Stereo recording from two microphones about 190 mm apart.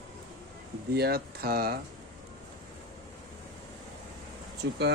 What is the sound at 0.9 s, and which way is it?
Speech, 55° right (ahead or behind).